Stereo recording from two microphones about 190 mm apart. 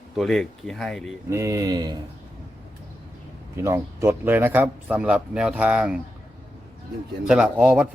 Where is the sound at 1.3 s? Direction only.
15° right (ahead or behind).